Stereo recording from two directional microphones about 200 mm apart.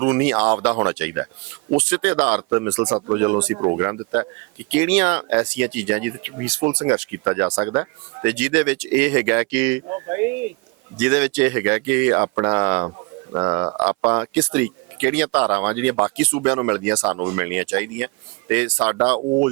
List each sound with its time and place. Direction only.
0.0 s speech: 10° right (ahead or behind)
13.8 s speech: 5° right (ahead or behind)